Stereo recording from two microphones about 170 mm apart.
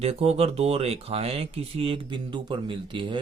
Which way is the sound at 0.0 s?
35° right (ahead or behind).